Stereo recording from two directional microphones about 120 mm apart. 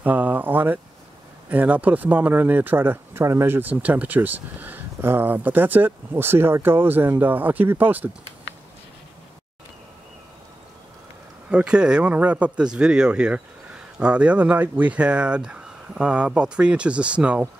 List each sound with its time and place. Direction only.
0.0 s a sound: 15° right (ahead or behind)
1.5 s speech: 15° right (ahead or behind)
11.5 s speech: 10° right (ahead or behind)